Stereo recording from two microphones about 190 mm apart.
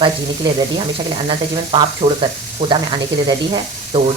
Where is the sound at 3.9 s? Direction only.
30° right (ahead or behind).